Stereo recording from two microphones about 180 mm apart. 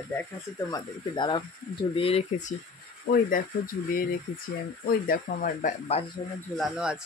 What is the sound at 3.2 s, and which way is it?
Speech, 50° left (ahead or behind).